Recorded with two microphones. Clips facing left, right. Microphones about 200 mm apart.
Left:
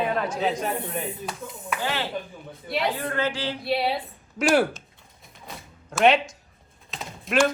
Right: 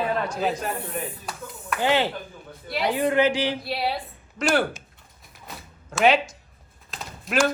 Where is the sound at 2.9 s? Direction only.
15° right (ahead or behind).